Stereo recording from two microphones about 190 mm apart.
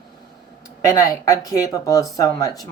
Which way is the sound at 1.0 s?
20° left (ahead or behind).